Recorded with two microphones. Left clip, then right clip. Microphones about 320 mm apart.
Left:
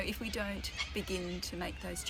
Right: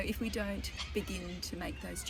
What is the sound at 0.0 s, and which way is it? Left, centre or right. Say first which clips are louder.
Speech: even; centre.